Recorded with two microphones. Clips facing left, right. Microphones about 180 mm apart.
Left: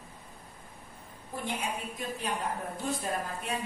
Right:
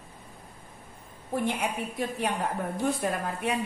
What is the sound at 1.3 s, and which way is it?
A woman's voice, 70° right (ahead or behind).